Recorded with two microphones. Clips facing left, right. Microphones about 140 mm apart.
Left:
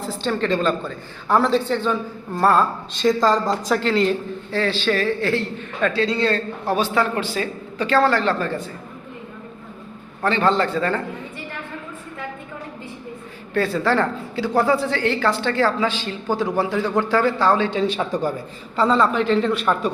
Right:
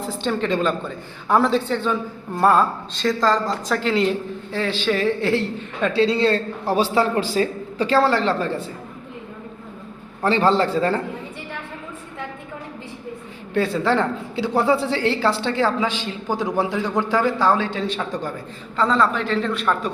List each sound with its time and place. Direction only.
0.0 s a woman's voice: 15° right (ahead or behind)
2.9 s a woman's voice: 15° left (ahead or behind)
3.8 s a woman's voice: 15° right (ahead or behind)
10.2 s a man's voice: 30° right (ahead or behind)
13.5 s a woman's voice: 15° right (ahead or behind); by 19.9 s 5° left (ahead or behind)